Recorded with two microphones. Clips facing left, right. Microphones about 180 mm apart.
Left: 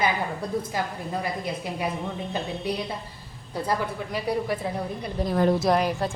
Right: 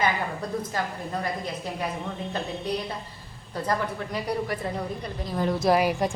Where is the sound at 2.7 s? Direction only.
10° left (ahead or behind).